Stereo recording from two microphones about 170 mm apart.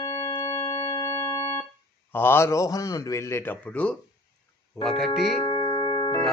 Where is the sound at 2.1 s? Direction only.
15° left (ahead or behind).